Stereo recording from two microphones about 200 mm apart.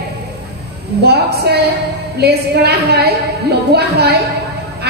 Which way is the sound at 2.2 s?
55° right (ahead or behind).